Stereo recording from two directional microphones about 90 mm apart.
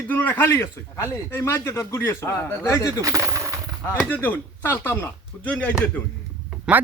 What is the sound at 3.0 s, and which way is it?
Coin, 35° right (ahead or behind).